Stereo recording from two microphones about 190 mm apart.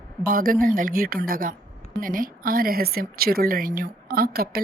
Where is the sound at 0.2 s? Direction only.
50° right (ahead or behind).